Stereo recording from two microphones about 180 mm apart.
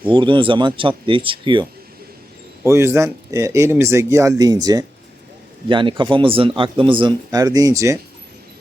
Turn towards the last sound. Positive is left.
turn(degrees=-15)  # may be behind; listen again after turning